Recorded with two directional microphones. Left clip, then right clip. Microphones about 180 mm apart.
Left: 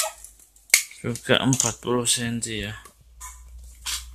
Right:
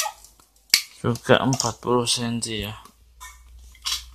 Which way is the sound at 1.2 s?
10° right (ahead or behind).